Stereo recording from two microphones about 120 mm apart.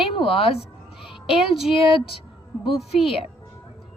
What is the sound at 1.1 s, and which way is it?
Child singing, 45° left (ahead or behind).